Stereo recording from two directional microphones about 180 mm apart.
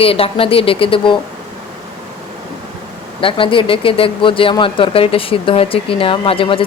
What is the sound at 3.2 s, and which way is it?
Speech, 30° left (ahead or behind).